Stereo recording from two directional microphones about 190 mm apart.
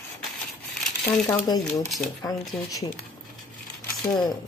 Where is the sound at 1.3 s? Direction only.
20° left (ahead or behind).